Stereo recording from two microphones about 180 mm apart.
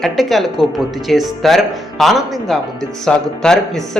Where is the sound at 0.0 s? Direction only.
Centre (ahead or behind).